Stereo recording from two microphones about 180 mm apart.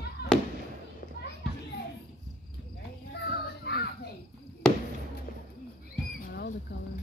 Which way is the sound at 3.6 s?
65° left (ahead or behind).